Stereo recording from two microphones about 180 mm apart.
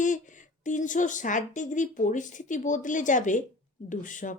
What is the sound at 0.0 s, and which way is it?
A woman's voice, 45° left (ahead or behind).